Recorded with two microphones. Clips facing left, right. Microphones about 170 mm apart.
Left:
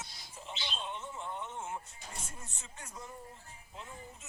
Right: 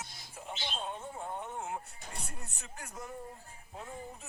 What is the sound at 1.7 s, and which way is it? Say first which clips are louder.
Music: right 2 dB; 65° right (ahead or behind).